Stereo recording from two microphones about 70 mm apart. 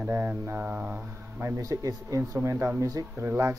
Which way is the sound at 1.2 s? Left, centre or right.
Right.